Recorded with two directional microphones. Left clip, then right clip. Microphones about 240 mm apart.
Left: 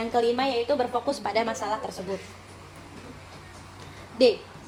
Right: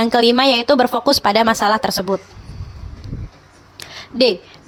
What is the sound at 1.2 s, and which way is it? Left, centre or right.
Speech, right.